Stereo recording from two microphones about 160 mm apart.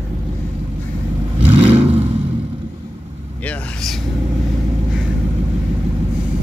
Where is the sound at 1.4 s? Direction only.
40° right (ahead or behind).